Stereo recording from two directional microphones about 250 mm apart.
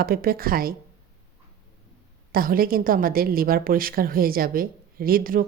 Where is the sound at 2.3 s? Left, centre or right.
Right.